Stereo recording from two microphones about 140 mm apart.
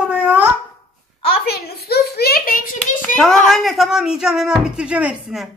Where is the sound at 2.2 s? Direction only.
90° left.